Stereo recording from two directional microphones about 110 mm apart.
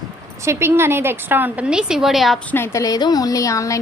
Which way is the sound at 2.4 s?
20° left (ahead or behind).